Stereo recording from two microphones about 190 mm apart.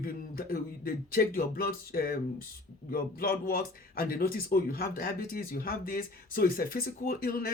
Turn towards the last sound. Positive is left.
turn(degrees=50)  # may be behind; listen again after turning